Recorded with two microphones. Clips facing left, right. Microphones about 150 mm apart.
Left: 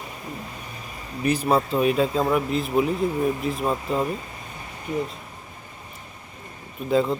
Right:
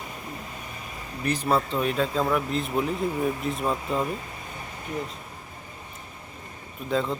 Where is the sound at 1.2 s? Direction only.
10° left (ahead or behind).